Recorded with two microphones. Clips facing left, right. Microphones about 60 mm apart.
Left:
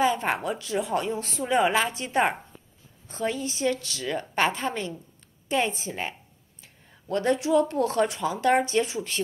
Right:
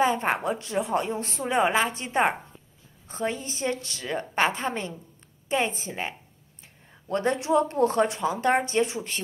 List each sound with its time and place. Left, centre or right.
0.0 s speech: right